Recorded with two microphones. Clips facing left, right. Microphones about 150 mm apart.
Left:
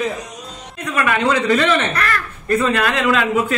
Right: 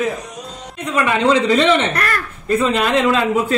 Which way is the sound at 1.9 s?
40° right (ahead or behind).